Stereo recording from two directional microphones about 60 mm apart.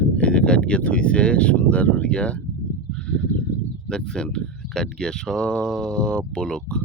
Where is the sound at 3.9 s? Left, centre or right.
Centre.